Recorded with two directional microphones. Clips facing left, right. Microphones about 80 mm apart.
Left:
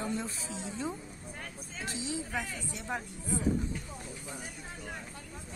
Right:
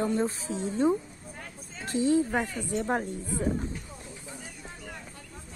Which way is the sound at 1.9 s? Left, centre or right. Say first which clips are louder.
Right 12 dB; right.